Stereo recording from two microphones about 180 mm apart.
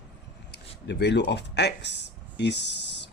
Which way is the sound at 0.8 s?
70° left (ahead or behind).